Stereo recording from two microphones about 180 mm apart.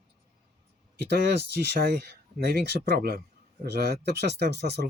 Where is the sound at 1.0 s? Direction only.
70° right (ahead or behind).